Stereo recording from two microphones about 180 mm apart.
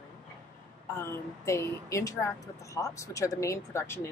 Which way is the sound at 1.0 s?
15° left (ahead or behind).